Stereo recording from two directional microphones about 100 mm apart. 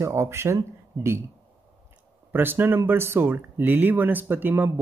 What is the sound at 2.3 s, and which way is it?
Speech, 20° right (ahead or behind).